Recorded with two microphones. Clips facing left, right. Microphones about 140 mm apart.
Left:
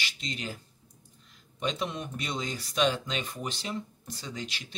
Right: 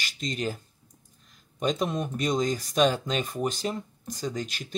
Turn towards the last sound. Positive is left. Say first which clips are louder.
# right 7 dB
turn(degrees=-45)  # may be behind; listen again after turning